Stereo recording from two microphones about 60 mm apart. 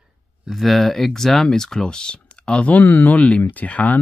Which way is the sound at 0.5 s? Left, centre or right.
Centre.